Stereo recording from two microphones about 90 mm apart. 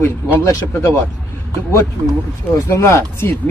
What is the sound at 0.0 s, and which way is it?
Speech, 30° left (ahead or behind).